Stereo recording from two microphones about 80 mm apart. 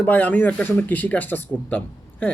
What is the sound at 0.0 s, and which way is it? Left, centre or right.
Speech, centre.